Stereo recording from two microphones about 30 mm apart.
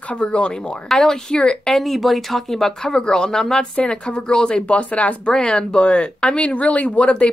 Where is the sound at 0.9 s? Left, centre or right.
Centre.